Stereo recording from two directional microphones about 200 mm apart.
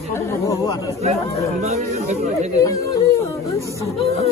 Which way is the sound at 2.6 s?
15° left (ahead or behind).